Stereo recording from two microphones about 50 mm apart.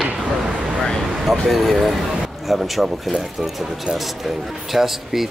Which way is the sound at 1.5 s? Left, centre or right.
Centre.